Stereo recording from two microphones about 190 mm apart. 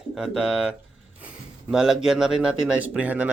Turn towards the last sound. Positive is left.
turn(degrees=-10)  # may be behind; listen again after turning